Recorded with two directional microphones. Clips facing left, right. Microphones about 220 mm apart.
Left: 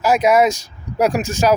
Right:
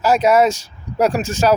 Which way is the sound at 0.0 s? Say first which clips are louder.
Even; 10° left (ahead or behind).